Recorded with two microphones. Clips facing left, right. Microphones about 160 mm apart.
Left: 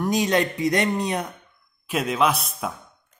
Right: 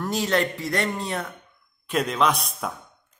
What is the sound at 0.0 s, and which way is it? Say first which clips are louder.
Speech: left 2 dB; 15° left (ahead or behind).